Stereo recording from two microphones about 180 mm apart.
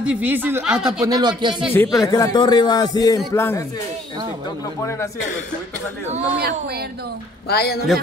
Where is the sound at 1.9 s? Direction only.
20° left (ahead or behind).